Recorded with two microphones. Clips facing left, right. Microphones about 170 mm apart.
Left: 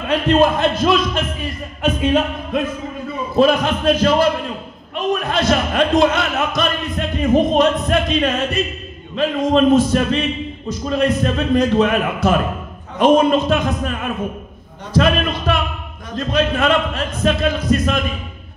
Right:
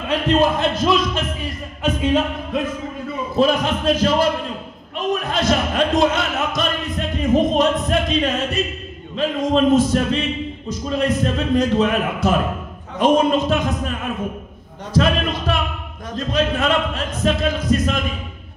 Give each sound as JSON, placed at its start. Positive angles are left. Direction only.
{"t": 0.1, "sound": "a man's voice", "side_deg": 60}